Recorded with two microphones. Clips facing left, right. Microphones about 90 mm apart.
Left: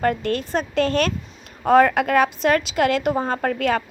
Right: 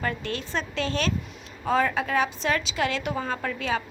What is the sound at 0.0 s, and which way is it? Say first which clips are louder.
A woman's voice: left 9 dB; 50° left (ahead or behind).